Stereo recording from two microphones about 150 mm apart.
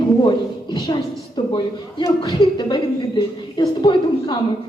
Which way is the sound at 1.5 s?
35° left (ahead or behind).